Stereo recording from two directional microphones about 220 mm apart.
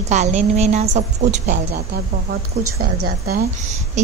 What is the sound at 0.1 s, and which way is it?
A woman's voice, 30° right (ahead or behind).